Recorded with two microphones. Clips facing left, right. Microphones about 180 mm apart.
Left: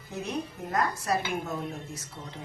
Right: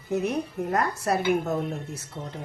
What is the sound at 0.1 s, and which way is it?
A woman's voice, 65° right (ahead or behind).